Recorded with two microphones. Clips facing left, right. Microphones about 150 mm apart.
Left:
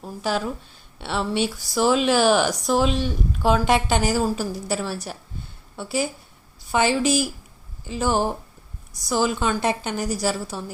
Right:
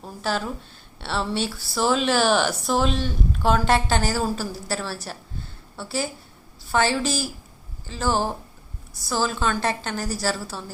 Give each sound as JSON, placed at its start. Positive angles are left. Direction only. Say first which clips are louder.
{"t": 0.2, "sound": "a woman's voice", "louder": "left 2 dB", "side_deg": 10}